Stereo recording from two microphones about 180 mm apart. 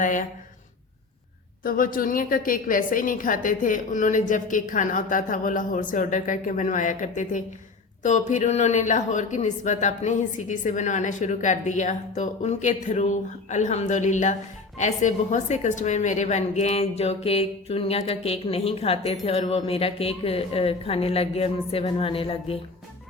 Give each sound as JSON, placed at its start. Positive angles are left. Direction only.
{"t": 0.0, "sound": "a woman's voice", "side_deg": 45}
{"t": 1.6, "sound": "a woman's voice", "side_deg": 50}